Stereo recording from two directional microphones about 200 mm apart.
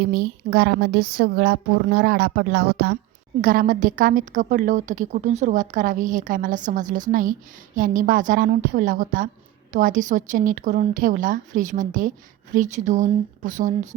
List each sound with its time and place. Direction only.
0.1 s a woman's voice: 55° right (ahead or behind)
3.4 s a woman's voice: 45° right (ahead or behind)